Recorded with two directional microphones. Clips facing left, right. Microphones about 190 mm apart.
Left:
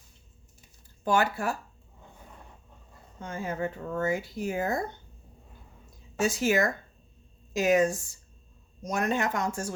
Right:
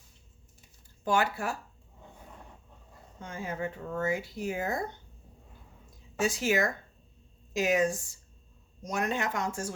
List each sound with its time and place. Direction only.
1.0 s speech: 45° left (ahead or behind)
3.2 s speech: 45° left (ahead or behind)
6.1 s speech: 45° left (ahead or behind)